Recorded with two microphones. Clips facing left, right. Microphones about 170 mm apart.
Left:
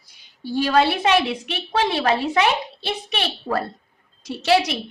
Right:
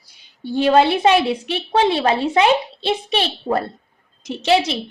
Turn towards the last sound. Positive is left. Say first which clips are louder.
# right 1 dB
turn(degrees=-25)  # may be behind; listen again after turning